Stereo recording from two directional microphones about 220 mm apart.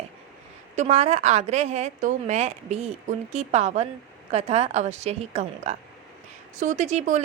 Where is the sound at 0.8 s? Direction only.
30° right (ahead or behind).